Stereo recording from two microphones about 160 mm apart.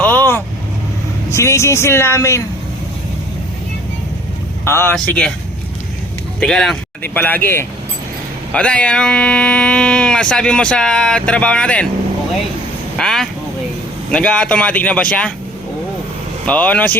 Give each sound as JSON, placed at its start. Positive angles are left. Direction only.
{"t": 0.0, "sound": "vehicle", "side_deg": 10}
{"t": 1.3, "sound": "speech", "side_deg": 15}
{"t": 4.6, "sound": "speech", "side_deg": 15}
{"t": 6.4, "sound": "speech", "side_deg": 5}
{"t": 13.0, "sound": "speech", "side_deg": 5}
{"t": 16.5, "sound": "speech", "side_deg": 10}